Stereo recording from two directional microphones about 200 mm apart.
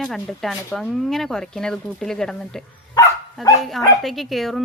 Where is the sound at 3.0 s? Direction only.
15° left (ahead or behind).